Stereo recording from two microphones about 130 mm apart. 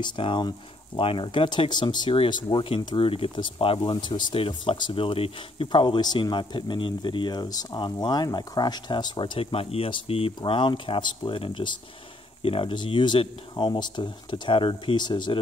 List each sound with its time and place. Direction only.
0.0 s speech: 35° left (ahead or behind)